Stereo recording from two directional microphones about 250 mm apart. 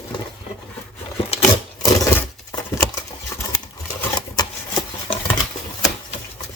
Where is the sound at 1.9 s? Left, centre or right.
Centre.